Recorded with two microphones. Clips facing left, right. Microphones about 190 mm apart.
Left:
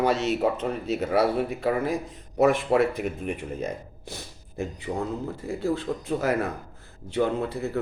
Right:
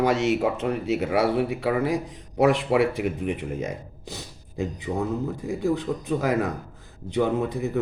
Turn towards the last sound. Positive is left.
turn(degrees=-15)  # may be behind; listen again after turning